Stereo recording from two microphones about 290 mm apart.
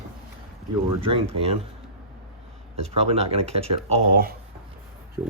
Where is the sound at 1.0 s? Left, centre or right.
Centre.